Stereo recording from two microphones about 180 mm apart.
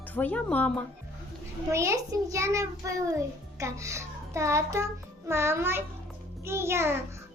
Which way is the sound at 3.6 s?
15° right (ahead or behind).